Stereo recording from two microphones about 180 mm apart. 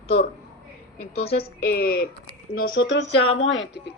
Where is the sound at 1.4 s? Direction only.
60° left (ahead or behind).